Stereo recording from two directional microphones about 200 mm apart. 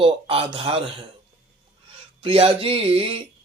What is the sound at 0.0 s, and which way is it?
Speech, 25° right (ahead or behind).